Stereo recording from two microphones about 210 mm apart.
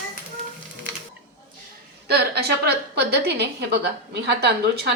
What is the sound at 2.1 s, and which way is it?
A woman's voice, 50° right (ahead or behind).